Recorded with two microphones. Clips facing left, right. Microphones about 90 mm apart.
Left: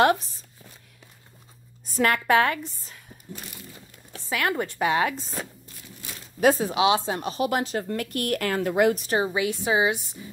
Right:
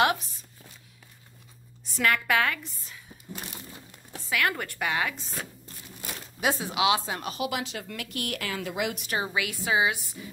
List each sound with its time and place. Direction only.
1.9 s speech: 40° left (ahead or behind)
4.3 s speech: 30° left (ahead or behind)
5.1 s speech: centre (ahead or behind)
6.4 s speech: 40° left (ahead or behind)
7.4 s speech: 40° left (ahead or behind); by 10.1 s 25° left (ahead or behind)